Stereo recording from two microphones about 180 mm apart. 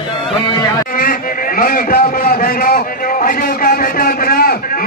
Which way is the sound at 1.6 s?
55° left (ahead or behind).